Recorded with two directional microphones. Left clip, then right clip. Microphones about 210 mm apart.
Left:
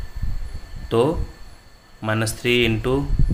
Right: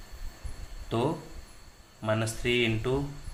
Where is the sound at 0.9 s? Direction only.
30° left (ahead or behind).